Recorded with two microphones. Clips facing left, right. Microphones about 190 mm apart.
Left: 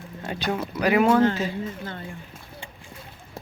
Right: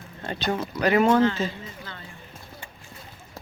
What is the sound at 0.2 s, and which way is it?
Speech, 10° left (ahead or behind).